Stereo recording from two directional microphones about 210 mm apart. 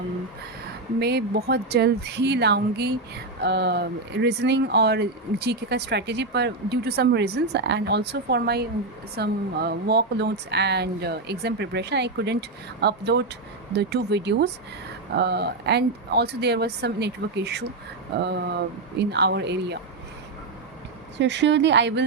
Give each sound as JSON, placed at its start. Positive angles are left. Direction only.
{"t": 0.9, "sound": "speech", "side_deg": -50}
{"t": 21.2, "sound": "speech", "side_deg": -55}